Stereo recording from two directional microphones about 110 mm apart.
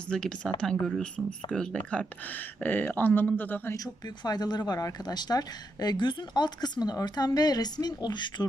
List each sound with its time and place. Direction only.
0.1 s speech: 5° left (ahead or behind)
4.0 s speech: 40° left (ahead or behind)